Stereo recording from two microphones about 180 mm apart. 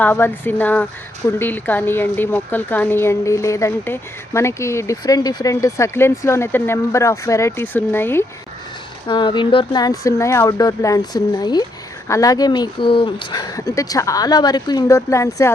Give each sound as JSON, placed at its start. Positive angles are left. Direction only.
{"t": 0.0, "sound": "speech", "side_deg": 10}
{"t": 9.0, "sound": "speech", "side_deg": 25}